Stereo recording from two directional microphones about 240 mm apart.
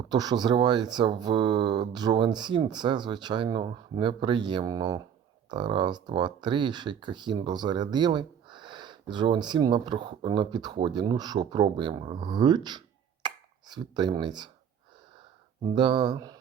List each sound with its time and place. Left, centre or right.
0.1 s speech: centre
15.6 s speech: centre